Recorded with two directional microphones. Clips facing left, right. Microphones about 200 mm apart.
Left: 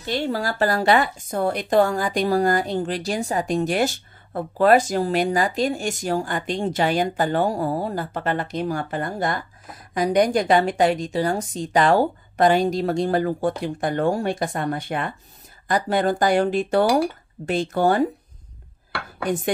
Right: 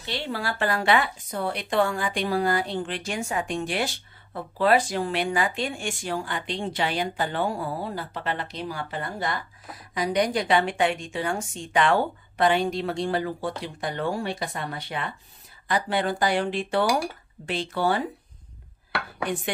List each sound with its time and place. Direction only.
0.0 s a woman's voice: 45° left (ahead or behind)